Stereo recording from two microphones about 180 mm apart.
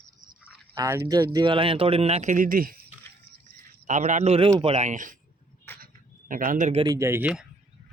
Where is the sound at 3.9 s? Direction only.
40° right (ahead or behind).